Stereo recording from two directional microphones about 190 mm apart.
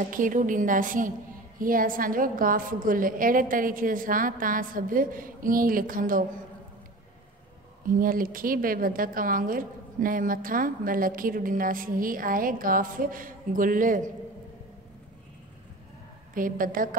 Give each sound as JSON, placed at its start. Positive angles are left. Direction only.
{"t": 0.1, "sound": "a woman's voice", "side_deg": -45}
{"t": 7.8, "sound": "a woman's voice", "side_deg": -45}
{"t": 16.3, "sound": "a woman's voice", "side_deg": -45}